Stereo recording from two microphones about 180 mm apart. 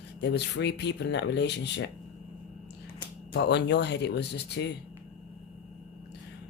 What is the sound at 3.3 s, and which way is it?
Speech, 70° left (ahead or behind).